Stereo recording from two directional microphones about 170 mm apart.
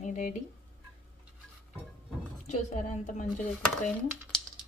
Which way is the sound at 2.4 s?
45° left (ahead or behind).